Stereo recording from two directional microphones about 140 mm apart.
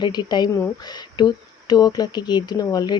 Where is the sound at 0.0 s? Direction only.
30° left (ahead or behind).